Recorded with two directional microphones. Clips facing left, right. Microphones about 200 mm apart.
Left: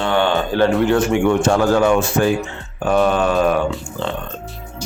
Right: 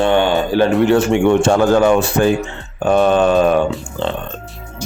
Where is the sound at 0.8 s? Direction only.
25° right (ahead or behind).